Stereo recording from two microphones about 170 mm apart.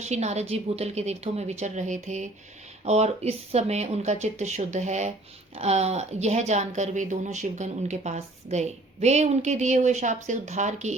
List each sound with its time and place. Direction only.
0.0 s speech: 40° right (ahead or behind)